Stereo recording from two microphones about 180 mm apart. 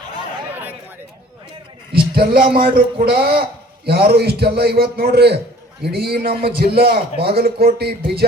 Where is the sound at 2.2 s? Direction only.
55° right (ahead or behind).